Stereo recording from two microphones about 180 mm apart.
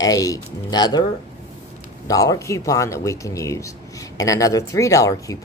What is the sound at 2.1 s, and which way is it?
Speech, 20° left (ahead or behind).